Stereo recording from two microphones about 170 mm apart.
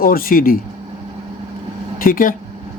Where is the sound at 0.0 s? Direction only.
55° left (ahead or behind).